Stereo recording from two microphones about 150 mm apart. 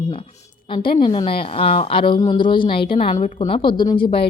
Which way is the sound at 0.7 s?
35° left (ahead or behind).